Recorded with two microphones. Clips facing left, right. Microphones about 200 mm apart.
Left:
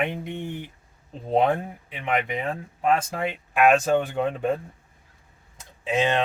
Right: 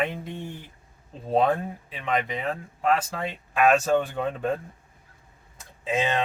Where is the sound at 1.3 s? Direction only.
20° left (ahead or behind).